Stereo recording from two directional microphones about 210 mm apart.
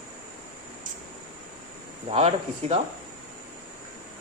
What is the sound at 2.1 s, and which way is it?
Speech, 30° right (ahead or behind).